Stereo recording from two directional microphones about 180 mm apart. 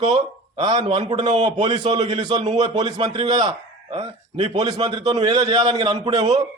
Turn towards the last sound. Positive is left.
turn(degrees=-25)  # may be behind; listen again after turning